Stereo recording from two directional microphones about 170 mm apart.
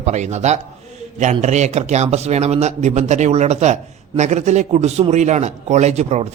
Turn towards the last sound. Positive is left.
turn(degrees=-40)  # may be behind; listen again after turning